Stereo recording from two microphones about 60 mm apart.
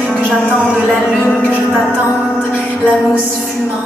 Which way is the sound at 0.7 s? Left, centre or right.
Centre.